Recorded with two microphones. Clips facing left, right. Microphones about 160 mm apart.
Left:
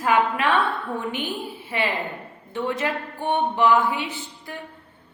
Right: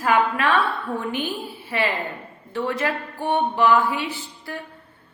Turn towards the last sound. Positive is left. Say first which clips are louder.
# right 2 dB
turn(degrees=20)  # may be behind; listen again after turning